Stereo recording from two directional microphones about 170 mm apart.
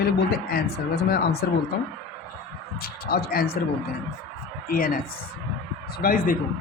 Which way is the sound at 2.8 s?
60° left (ahead or behind).